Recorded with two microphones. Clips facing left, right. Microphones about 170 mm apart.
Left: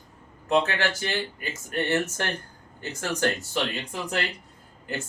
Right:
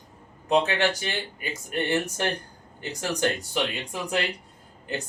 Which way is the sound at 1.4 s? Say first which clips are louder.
Even; 15° right (ahead or behind).